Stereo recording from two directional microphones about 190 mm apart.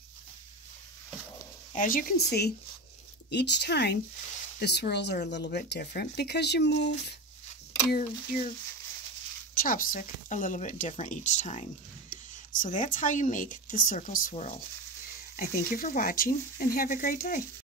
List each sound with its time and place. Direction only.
1.8 s speech: 45° left (ahead or behind); by 6.9 s 60° left (ahead or behind)
7.9 s speech: 50° left (ahead or behind)
9.6 s speech: 45° left (ahead or behind)
15.3 s speech: 45° left (ahead or behind)